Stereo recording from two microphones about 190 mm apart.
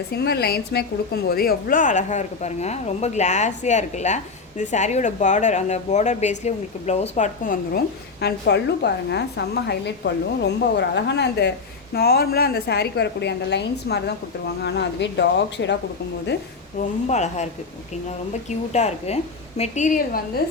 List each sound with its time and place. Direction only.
0.1 s a woman's voice: 55° left (ahead or behind)
8.2 s a woman's voice: 60° left (ahead or behind)
17.1 s a woman's voice: 35° left (ahead or behind)